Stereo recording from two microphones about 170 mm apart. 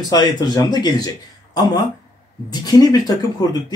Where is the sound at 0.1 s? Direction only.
25° left (ahead or behind).